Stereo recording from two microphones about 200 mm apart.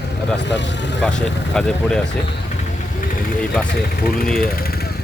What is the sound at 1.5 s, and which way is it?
Speech, 5° left (ahead or behind).